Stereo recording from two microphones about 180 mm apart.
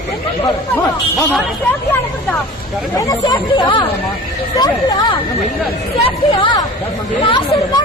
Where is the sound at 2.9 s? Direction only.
20° left (ahead or behind).